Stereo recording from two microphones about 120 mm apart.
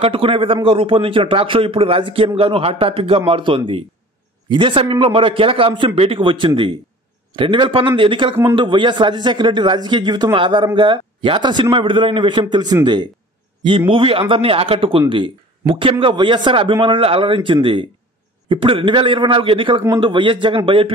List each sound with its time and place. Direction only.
0.0 s a man's voice: 50° right (ahead or behind)